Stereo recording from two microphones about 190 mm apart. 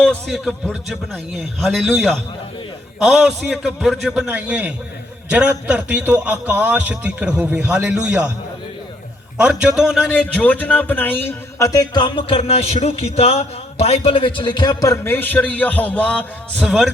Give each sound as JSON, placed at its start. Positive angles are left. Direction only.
{"t": 0.0, "sound": "a man's voice", "side_deg": 5}
{"t": 9.4, "sound": "speech", "side_deg": -5}